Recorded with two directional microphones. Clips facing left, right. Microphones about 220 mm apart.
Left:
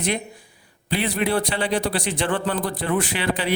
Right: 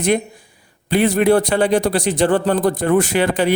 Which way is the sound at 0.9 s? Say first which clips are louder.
Right 9 dB; 45° right (ahead or behind).